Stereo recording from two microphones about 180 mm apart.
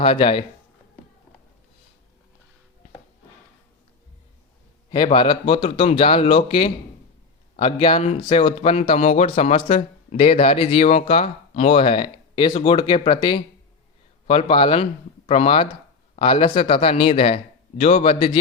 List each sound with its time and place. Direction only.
0.0 s speech: 30° left (ahead or behind)
4.9 s speech: 25° left (ahead or behind)
5.6 s speech: 40° left (ahead or behind)